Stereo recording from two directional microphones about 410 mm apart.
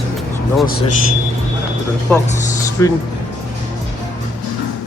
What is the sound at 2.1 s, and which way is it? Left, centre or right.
Speech, centre.